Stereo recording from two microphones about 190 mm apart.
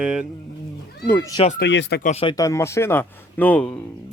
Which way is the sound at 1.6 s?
65° left (ahead or behind).